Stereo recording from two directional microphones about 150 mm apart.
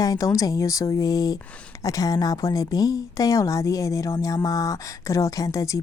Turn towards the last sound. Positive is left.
turn(degrees=20)  # may be behind; listen again after turning